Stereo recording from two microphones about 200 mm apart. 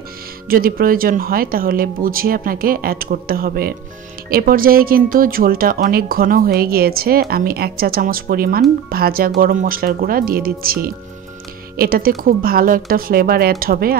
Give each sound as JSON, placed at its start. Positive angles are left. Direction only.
{"t": 0.5, "sound": "speech", "side_deg": -45}